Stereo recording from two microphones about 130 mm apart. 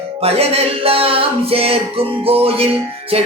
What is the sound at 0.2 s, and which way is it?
Music, 50° right (ahead or behind).